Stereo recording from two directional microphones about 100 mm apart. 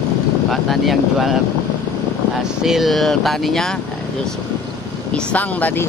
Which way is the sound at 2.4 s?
5° right (ahead or behind).